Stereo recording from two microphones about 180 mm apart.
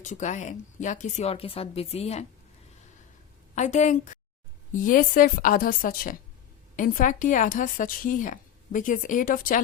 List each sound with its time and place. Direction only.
0.0 s speech: 40° left (ahead or behind)
3.5 s a woman's voice: 40° left (ahead or behind)